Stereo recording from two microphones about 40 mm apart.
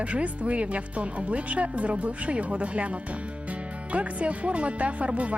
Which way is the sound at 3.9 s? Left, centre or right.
Right.